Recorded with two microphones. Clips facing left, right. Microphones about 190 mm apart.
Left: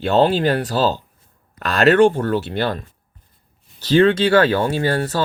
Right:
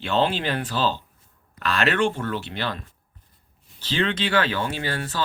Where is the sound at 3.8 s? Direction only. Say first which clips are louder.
Left 11 dB; 40° left (ahead or behind).